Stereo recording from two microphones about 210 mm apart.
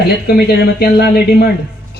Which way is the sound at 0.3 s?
50° left (ahead or behind).